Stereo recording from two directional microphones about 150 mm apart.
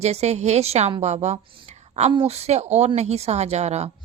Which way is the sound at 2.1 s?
45° right (ahead or behind).